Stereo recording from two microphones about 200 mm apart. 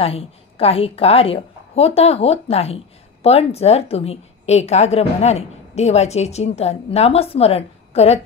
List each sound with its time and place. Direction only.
0.0 s a woman's voice: 30° left (ahead or behind)